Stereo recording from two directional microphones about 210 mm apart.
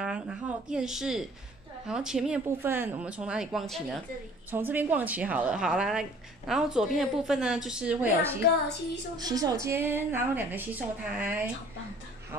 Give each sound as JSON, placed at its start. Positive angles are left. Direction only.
{"t": 0.0, "sound": "a woman's voice", "side_deg": -5}
{"t": 4.5, "sound": "a woman's voice", "side_deg": -10}